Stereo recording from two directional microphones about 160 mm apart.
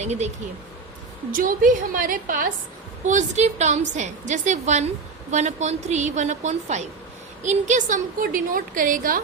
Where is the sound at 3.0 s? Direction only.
45° right (ahead or behind).